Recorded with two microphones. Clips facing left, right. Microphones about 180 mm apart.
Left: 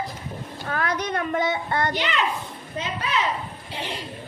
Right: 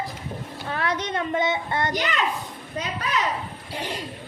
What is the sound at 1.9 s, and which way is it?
A woman's voice, 45° right (ahead or behind).